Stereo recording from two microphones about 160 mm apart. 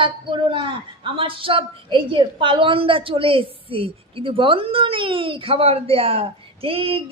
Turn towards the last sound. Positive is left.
turn(degrees=-35)  # may be behind; listen again after turning